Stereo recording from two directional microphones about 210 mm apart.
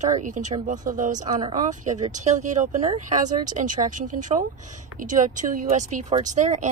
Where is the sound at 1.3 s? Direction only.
25° right (ahead or behind).